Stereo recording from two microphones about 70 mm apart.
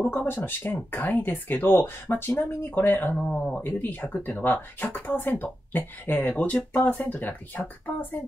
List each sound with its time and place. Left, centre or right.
0.1 s speech: left
3.3 s speech: centre
3.6 s speech: left